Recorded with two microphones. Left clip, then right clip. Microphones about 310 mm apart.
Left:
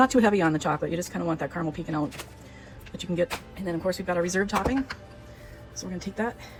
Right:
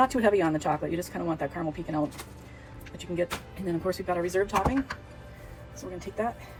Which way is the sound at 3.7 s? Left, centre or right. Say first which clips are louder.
Left 1 dB; left.